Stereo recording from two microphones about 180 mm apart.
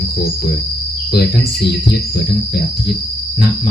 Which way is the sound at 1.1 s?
60° left (ahead or behind).